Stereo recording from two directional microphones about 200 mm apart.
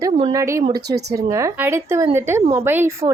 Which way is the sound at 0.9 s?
55° right (ahead or behind).